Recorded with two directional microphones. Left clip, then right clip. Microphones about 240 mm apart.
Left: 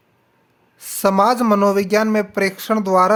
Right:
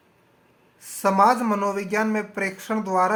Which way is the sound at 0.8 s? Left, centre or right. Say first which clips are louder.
Left 3 dB; left.